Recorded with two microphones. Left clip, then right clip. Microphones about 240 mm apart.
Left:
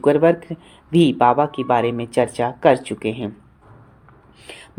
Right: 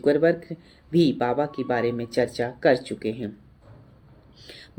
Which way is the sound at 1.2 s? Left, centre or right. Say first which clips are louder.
Left 9 dB; left.